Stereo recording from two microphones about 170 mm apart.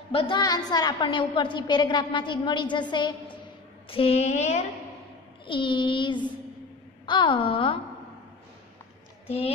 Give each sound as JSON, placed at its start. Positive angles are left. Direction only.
{"t": 0.1, "sound": "a woman's voice", "side_deg": 30}
{"t": 5.5, "sound": "a woman's voice", "side_deg": 30}